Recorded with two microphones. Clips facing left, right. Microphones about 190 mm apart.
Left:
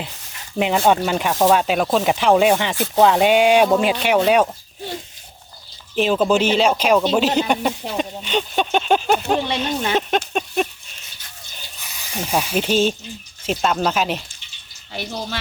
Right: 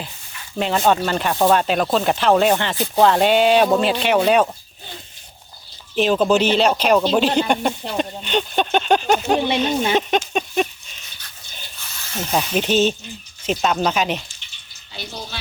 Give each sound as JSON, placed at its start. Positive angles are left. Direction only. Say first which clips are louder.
{"t": 0.6, "sound": "speech", "louder": "left 1 dB", "side_deg": 15}
{"t": 6.0, "sound": "speech", "louder": "right 1 dB", "side_deg": 5}
{"t": 11.8, "sound": "a sound", "louder": "even", "side_deg": 15}
{"t": 12.4, "sound": "speech", "louder": "right 1 dB", "side_deg": 10}